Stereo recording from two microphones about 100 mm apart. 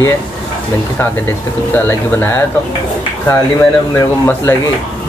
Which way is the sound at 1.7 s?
25° left (ahead or behind).